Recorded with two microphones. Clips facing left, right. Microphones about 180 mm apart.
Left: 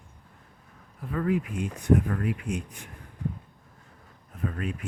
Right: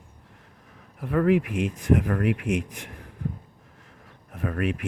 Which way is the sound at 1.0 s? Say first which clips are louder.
Right 6 dB; 75° right (ahead or behind).